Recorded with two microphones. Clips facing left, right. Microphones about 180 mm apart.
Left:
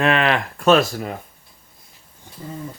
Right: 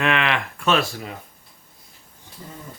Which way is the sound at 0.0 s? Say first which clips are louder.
Left 4 dB; 40° left (ahead or behind).